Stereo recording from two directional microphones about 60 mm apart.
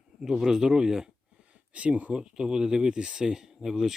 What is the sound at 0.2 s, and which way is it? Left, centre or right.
Speech, centre.